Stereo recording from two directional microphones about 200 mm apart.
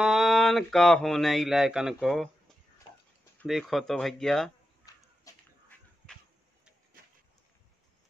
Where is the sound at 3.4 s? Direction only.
Centre (ahead or behind).